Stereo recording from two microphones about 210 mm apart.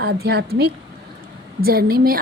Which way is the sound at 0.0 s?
50° right (ahead or behind).